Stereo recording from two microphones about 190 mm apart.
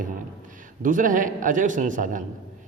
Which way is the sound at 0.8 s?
45° right (ahead or behind).